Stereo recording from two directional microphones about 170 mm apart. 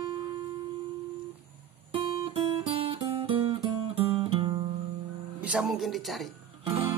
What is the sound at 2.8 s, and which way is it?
Music, 30° right (ahead or behind).